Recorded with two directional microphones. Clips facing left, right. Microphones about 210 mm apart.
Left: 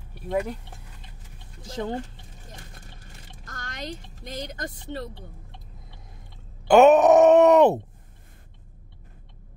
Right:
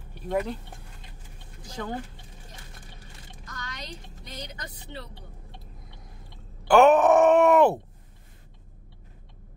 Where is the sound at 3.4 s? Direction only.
50° left (ahead or behind).